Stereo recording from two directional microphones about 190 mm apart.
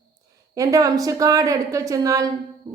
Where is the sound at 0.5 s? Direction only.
20° right (ahead or behind).